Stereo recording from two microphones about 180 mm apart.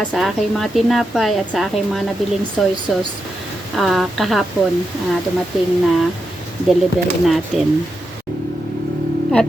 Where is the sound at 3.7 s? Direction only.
Centre (ahead or behind).